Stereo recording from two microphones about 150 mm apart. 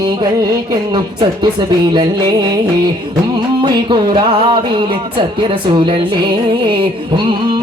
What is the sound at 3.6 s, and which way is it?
Music, 30° right (ahead or behind).